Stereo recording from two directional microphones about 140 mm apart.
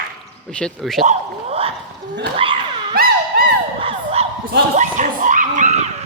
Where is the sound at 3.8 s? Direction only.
40° right (ahead or behind).